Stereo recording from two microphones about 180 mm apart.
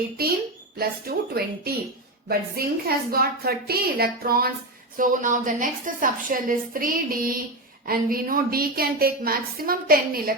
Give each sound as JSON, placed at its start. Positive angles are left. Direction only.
{"t": 0.8, "sound": "a woman's voice", "side_deg": -60}